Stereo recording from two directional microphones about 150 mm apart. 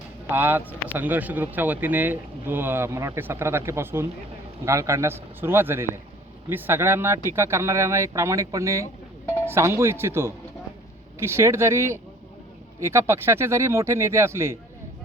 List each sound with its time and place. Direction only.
0.3 s speech: 15° right (ahead or behind)